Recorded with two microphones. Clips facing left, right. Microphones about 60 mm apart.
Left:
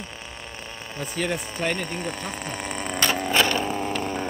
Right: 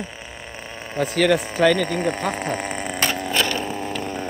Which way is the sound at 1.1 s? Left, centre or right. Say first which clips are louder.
Right 9 dB; right.